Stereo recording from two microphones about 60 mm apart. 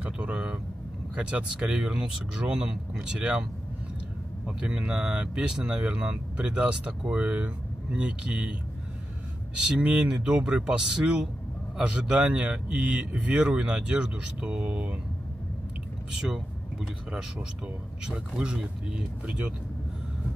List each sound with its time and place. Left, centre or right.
0.0 s speech: right
4.5 s speech: centre
9.7 s speech: centre
18.0 s speech: centre